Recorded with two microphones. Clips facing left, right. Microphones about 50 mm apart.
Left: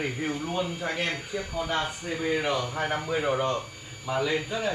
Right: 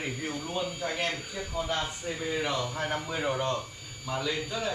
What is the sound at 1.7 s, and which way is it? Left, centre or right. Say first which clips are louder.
A man's voice: left 3 dB; left.